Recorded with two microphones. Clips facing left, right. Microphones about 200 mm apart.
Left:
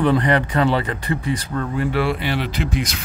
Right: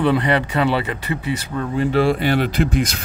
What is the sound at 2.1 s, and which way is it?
Speech, 45° right (ahead or behind).